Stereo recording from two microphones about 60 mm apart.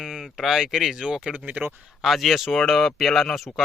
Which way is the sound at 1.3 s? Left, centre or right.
Right.